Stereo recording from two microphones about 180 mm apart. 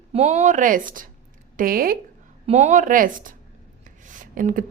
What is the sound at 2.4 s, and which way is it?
A woman's voice, 40° right (ahead or behind).